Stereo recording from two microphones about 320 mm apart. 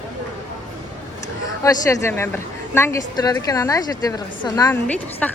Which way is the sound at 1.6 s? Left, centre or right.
Centre.